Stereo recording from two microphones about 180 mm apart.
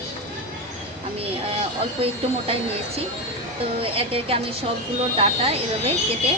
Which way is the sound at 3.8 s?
30° right (ahead or behind).